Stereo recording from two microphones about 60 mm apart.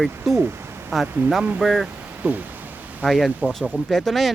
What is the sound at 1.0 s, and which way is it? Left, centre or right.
Speech, right.